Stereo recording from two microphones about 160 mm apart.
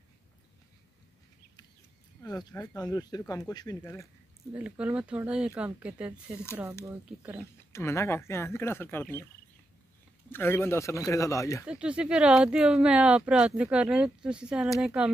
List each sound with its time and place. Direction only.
2.2 s speech: 25° left (ahead or behind)
4.6 s speech: 10° right (ahead or behind)
7.7 s speech: 15° left (ahead or behind)
10.3 s speech: 10° left (ahead or behind)
11.6 s speech: 5° right (ahead or behind)